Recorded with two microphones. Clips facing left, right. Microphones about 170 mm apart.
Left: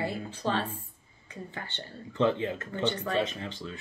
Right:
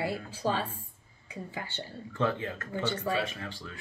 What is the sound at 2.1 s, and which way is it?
Speech, 20° left (ahead or behind).